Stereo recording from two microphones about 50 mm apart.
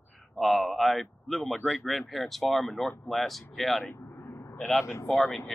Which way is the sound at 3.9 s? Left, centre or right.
Left.